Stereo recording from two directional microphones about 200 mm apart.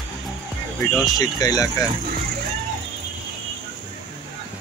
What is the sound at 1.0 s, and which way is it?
Speech, 20° left (ahead or behind).